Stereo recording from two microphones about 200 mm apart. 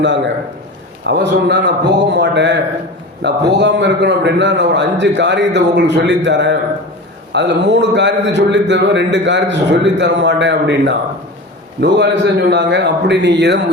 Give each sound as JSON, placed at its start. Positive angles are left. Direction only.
{"t": 1.0, "sound": "a man's voice", "side_deg": -60}